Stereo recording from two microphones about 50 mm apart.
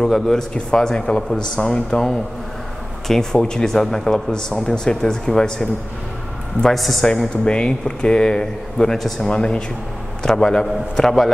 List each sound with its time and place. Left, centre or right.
0.0 s speech: centre
3.1 s speech: centre
6.7 s a man's voice: centre
7.4 s speech: centre